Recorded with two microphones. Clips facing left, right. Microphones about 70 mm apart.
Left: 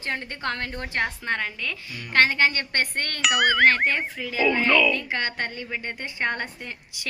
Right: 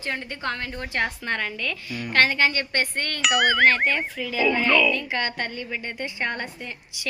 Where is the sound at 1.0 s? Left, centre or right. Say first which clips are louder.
Even; left.